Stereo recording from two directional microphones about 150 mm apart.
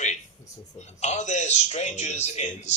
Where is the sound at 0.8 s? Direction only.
50° left (ahead or behind).